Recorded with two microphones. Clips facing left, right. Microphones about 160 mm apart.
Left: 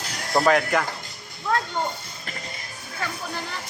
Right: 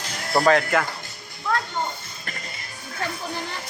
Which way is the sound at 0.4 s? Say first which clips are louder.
Right 1 dB; 5° right (ahead or behind).